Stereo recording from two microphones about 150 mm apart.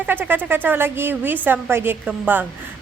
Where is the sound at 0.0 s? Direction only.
15° right (ahead or behind).